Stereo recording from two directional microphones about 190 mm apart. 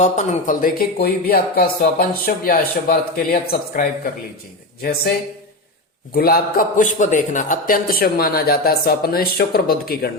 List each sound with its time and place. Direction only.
0.0 s speech: 40° left (ahead or behind)
6.1 s speech: 50° left (ahead or behind)